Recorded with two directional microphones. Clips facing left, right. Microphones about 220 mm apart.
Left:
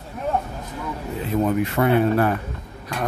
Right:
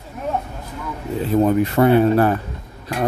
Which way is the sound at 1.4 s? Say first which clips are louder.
Right 5 dB; 35° right (ahead or behind).